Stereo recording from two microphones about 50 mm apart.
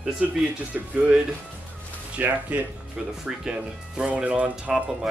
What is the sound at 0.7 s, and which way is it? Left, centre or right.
Speech, right.